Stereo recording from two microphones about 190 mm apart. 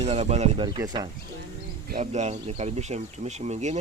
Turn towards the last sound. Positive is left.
turn(degrees=-35)  # may be behind; listen again after turning